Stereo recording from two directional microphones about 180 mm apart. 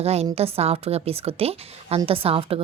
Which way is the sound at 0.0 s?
35° right (ahead or behind).